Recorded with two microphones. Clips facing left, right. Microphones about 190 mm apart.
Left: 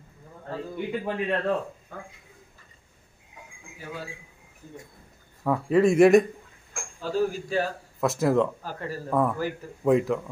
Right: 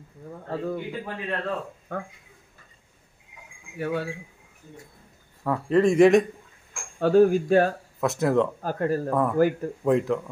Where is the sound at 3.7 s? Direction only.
65° right (ahead or behind).